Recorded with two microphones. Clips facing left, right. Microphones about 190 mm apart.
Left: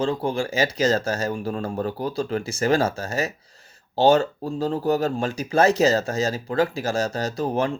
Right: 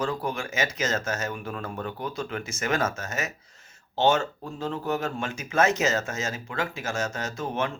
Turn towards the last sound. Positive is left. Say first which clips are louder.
# left 6 dB
turn(degrees=35)  # may be behind; listen again after turning